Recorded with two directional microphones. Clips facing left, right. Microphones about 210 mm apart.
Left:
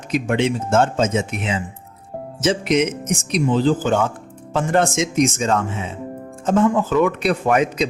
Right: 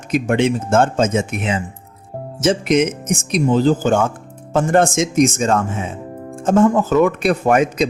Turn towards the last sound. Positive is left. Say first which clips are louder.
# right 3 dB
turn(degrees=-45)  # may be behind; listen again after turning